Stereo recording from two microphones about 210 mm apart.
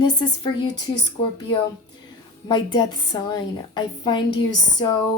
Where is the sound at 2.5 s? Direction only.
20° left (ahead or behind).